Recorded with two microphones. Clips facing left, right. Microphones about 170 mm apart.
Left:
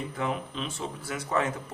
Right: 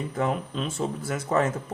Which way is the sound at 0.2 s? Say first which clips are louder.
Right 5 dB; 45° right (ahead or behind).